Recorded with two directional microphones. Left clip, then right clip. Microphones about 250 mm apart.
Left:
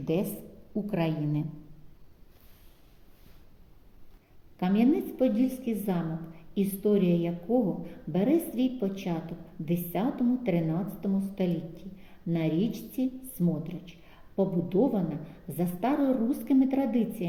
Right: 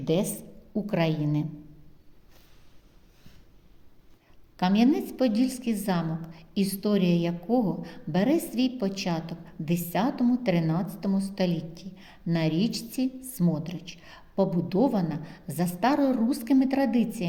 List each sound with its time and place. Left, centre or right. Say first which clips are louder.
0.0 s a woman's voice: right 3 dB; right
4.5 s a woman's voice: right 2 dB; right